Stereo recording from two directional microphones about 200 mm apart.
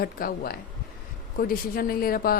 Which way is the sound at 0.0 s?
45° left (ahead or behind).